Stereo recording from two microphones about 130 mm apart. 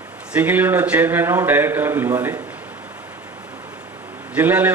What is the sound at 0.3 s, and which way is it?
Speech, 15° right (ahead or behind).